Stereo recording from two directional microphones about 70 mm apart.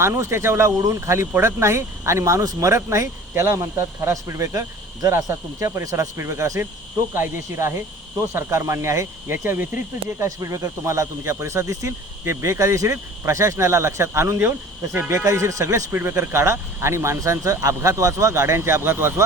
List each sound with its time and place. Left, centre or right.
0.0 s speech: right
10.2 s speech: right
15.2 s speech: right
15.9 s speech: right